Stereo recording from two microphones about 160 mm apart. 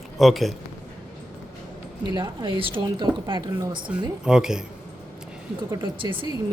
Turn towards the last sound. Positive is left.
turn(degrees=-30)  # may be behind; listen again after turning